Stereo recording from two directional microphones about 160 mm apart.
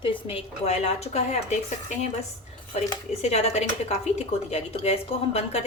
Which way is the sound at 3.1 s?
40° left (ahead or behind).